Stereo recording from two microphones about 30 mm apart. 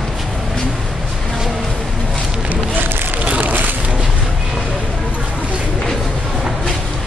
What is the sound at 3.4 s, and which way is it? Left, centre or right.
Vehicle, right.